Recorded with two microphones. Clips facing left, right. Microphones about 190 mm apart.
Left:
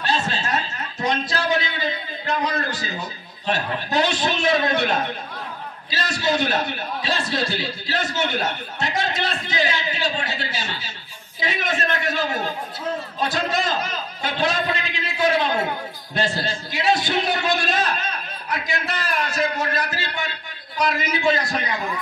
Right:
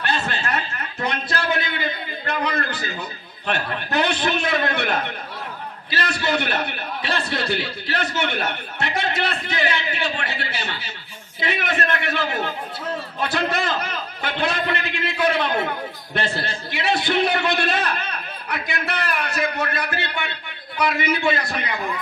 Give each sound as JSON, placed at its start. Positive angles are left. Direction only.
{"t": 0.0, "sound": "chuckle", "side_deg": -60}
{"t": 1.0, "sound": "a sound", "side_deg": -60}
{"t": 3.4, "sound": "a man's voice", "side_deg": -60}